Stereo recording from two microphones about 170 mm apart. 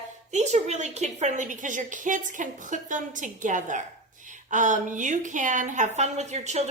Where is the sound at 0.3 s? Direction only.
40° right (ahead or behind).